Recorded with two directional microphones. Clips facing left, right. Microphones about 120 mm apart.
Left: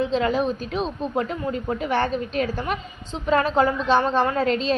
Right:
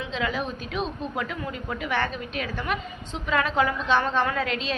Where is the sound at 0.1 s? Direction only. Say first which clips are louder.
Left 7 dB; 40° left (ahead or behind).